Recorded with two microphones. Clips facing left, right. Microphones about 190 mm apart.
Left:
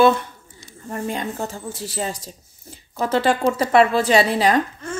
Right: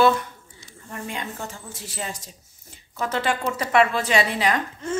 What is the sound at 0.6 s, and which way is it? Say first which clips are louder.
Speech: left 7 dB; 40° left (ahead or behind).